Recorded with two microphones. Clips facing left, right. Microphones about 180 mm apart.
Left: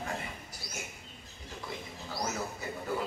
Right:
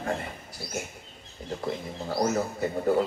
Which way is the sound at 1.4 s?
55° right (ahead or behind).